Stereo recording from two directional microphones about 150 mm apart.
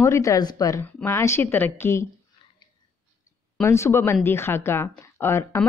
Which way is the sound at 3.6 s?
15° left (ahead or behind).